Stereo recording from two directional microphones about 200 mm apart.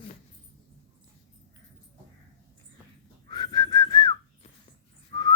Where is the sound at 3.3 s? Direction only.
20° left (ahead or behind).